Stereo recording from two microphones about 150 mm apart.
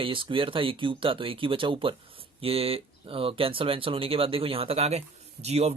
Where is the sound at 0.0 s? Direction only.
35° right (ahead or behind).